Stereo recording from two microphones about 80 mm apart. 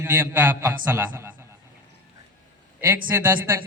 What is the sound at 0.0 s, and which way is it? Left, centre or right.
A man's voice, right.